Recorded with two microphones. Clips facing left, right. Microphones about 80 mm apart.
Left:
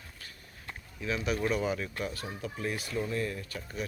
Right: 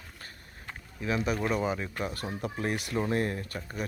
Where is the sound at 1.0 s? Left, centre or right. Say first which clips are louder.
Right 3 dB; right.